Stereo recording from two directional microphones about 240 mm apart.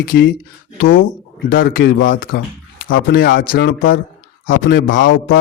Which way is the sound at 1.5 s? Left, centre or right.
Left.